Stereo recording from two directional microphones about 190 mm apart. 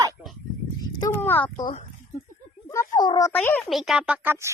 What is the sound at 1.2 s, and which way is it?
Speech, 10° left (ahead or behind).